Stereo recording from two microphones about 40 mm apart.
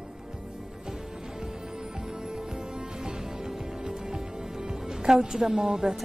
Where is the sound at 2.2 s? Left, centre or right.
Centre.